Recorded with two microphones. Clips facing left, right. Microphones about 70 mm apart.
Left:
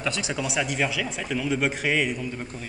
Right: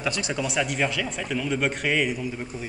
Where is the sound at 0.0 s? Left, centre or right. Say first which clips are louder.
Right 1 dB; centre.